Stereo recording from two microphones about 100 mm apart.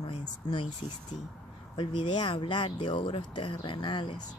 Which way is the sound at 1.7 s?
55° left (ahead or behind).